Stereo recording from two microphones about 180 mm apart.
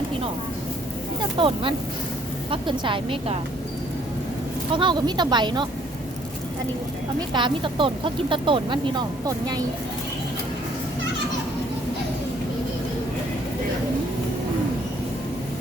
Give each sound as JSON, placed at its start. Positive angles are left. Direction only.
{"t": 1.4, "sound": "speech", "side_deg": -30}
{"t": 4.7, "sound": "speech", "side_deg": -25}
{"t": 7.2, "sound": "speech", "side_deg": -25}